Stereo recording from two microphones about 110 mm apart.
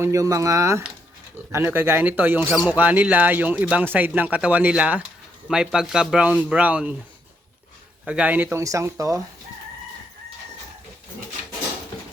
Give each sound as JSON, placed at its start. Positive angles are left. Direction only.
{"t": 0.0, "sound": "speech", "side_deg": -30}
{"t": 8.0, "sound": "speech", "side_deg": -10}
{"t": 8.6, "sound": "speech", "side_deg": -30}